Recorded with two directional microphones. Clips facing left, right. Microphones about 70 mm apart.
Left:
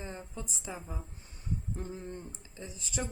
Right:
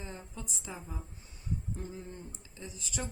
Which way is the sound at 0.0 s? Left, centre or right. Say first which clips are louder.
Left 2 dB; left.